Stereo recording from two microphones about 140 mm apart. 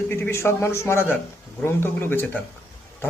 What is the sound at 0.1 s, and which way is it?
Speech, 20° left (ahead or behind).